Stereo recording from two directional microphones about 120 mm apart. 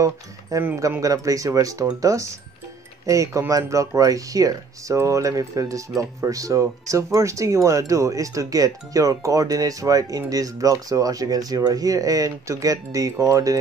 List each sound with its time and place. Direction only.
0.0 s speech: 25° right (ahead or behind)